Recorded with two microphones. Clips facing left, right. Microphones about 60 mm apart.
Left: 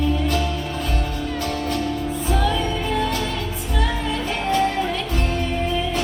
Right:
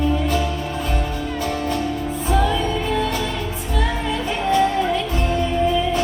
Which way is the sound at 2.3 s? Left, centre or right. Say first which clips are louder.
Right 3 dB; centre.